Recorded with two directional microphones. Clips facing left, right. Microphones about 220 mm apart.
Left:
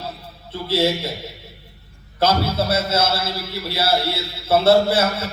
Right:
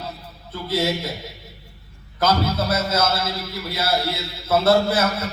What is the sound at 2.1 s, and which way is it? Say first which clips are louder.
A man's voice: left 1 dB; 30° left (ahead or behind).